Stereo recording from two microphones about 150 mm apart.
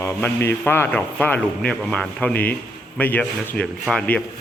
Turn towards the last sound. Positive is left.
turn(degrees=5)  # may be behind; listen again after turning